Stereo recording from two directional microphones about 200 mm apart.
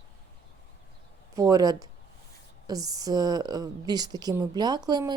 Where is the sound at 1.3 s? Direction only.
20° right (ahead or behind).